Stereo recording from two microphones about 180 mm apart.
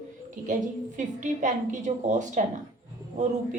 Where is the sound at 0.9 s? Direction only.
45° right (ahead or behind).